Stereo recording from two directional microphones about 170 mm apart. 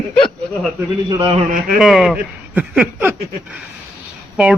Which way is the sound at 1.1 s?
30° right (ahead or behind).